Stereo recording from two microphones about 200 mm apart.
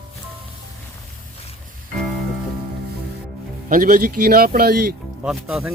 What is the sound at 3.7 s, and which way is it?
Speech, 45° right (ahead or behind).